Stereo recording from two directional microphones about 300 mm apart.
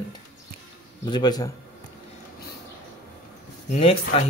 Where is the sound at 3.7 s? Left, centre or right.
Centre.